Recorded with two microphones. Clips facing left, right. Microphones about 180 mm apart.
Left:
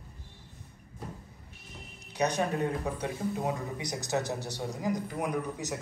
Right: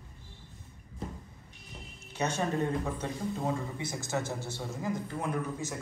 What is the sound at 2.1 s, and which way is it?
Speech, 15° left (ahead or behind).